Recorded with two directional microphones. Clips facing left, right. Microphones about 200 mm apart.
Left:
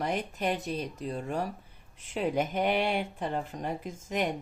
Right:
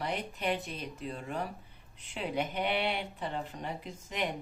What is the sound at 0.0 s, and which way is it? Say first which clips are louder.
Speech: left 4 dB; 45° left (ahead or behind).